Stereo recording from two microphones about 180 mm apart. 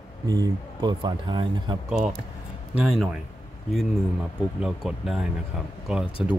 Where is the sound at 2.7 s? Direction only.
Centre (ahead or behind).